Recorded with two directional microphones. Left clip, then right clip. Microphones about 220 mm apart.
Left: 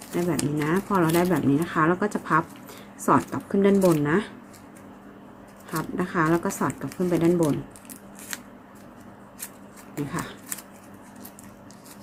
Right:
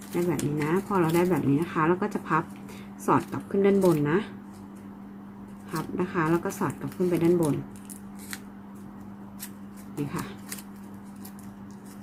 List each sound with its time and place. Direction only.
0.3 s speech: 10° left (ahead or behind)
5.7 s speech: 10° left (ahead or behind)
10.1 s speech: 5° left (ahead or behind)